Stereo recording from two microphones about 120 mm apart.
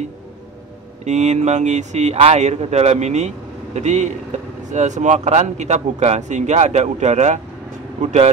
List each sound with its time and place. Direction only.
1.0 s speech: 75° right (ahead or behind)
2.1 s speech: 60° right (ahead or behind)